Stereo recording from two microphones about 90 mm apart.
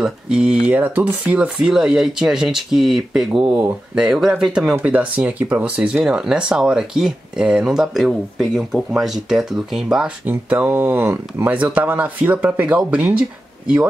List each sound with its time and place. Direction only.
0.0 s speech: 5° right (ahead or behind)
10.6 s speech: 25° right (ahead or behind)